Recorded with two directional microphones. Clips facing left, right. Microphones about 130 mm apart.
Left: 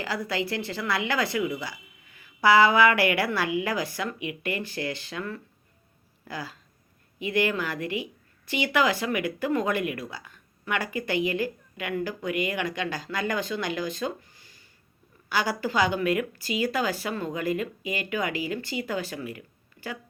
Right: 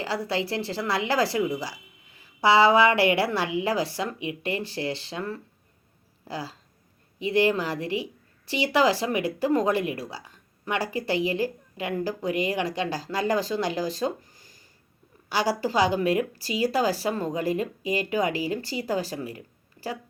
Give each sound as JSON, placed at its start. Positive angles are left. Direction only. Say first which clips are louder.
{"t": 0.0, "sound": "a woman's voice", "louder": "right 2 dB", "side_deg": -30}